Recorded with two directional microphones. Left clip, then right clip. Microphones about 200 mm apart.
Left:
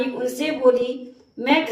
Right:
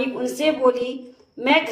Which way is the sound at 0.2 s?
35° right (ahead or behind).